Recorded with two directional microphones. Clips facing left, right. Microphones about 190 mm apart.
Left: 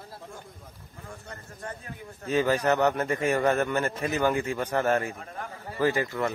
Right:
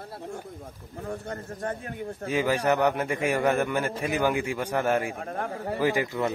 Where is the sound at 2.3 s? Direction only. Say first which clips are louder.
Left 1 dB; 10° right (ahead or behind).